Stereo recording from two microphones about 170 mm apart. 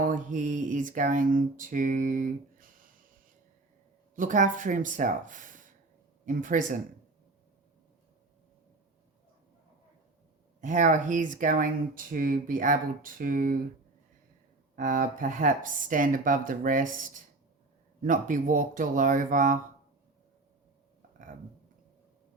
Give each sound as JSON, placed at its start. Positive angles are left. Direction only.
{"t": 0.0, "sound": "speech", "side_deg": -50}
{"t": 4.1, "sound": "speech", "side_deg": -50}
{"t": 10.6, "sound": "speech", "side_deg": -45}
{"t": 14.8, "sound": "speech", "side_deg": -50}
{"t": 18.0, "sound": "speech", "side_deg": -50}